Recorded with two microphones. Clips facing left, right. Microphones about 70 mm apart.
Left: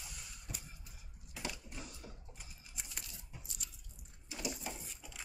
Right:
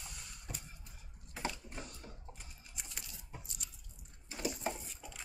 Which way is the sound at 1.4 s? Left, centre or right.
Right.